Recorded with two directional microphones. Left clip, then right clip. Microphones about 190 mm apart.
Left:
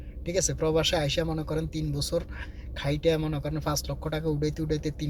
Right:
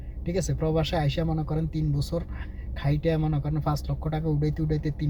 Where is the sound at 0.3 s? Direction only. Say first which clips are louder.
Left 2 dB; 15° right (ahead or behind).